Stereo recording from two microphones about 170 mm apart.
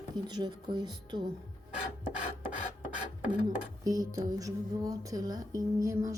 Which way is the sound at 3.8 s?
20° right (ahead or behind).